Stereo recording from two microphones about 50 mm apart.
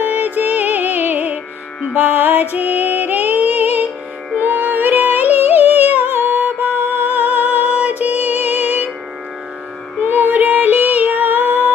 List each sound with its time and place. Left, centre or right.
0.0 s music: right
9.9 s music: right